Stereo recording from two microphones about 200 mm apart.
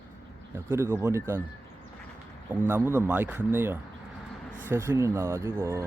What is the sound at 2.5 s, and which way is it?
Speech, 10° right (ahead or behind).